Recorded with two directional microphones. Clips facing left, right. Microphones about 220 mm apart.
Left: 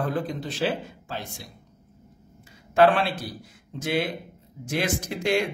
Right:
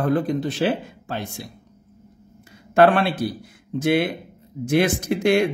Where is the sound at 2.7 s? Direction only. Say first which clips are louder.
Right 3 dB; 55° right (ahead or behind).